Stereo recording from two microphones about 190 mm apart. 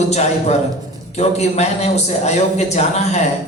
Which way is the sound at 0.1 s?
35° left (ahead or behind).